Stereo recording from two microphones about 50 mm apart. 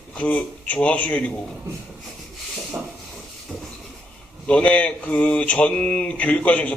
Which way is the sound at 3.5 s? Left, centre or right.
Centre.